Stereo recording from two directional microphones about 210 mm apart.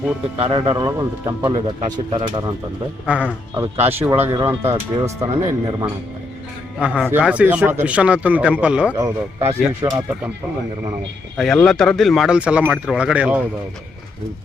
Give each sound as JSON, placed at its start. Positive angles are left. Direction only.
{"t": 0.3, "sound": "speech", "side_deg": -20}
{"t": 3.1, "sound": "speech", "side_deg": -5}
{"t": 11.3, "sound": "speech", "side_deg": 0}